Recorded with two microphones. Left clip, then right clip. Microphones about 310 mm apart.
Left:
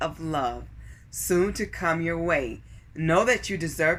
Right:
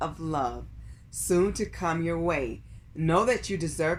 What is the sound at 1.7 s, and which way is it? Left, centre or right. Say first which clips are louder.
Speech: left 3 dB; centre.